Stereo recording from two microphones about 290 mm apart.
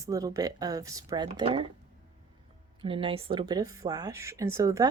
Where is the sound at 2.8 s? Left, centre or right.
Centre.